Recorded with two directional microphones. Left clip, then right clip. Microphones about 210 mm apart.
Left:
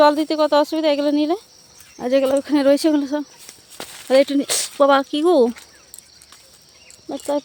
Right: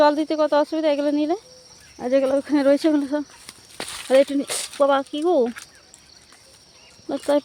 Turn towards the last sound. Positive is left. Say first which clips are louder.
# right 2 dB
turn(degrees=-10)  # may be behind; listen again after turning